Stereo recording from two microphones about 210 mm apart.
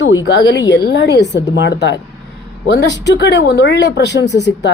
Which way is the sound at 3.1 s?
55° left (ahead or behind).